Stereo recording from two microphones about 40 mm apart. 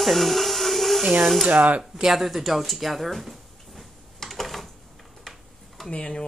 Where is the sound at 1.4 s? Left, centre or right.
Right.